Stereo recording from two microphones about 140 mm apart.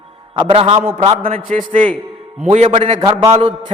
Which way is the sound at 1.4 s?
70° right (ahead or behind).